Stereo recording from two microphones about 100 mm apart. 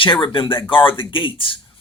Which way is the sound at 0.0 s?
60° left (ahead or behind).